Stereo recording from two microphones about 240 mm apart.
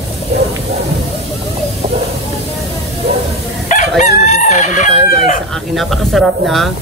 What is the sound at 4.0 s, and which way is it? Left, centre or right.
Chicken, left.